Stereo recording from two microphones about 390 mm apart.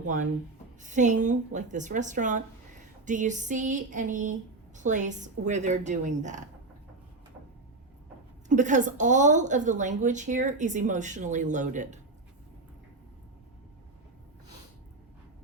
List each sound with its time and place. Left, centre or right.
0.8 s a woman's voice: centre
8.4 s a woman's voice: centre